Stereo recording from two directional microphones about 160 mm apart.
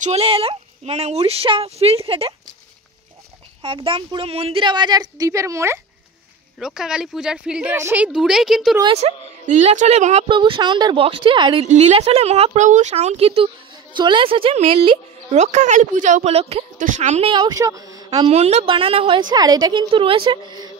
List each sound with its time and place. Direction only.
0.0 s a woman's voice: 40° right (ahead or behind)
3.6 s a woman's voice: 35° right (ahead or behind); by 5.8 s 20° right (ahead or behind)
6.6 s speech: 5° right (ahead or behind)
8.8 s a woman's voice: 40° right (ahead or behind)
10.2 s a woman's voice: 30° right (ahead or behind)
11.6 s a woman's voice: 45° right (ahead or behind)
15.3 s a woman's voice: 45° right (ahead or behind)
16.7 s a woman's voice: 50° right (ahead or behind)
17.3 s a woman's voice: 25° right (ahead or behind)
18.3 s a woman's voice: 40° right (ahead or behind); by 20.7 s 25° right (ahead or behind)